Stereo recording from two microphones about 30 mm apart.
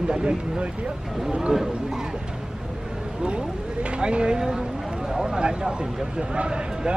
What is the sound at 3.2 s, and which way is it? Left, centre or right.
Speech, right.